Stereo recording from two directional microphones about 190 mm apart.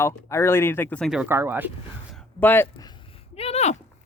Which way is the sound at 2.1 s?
10° left (ahead or behind).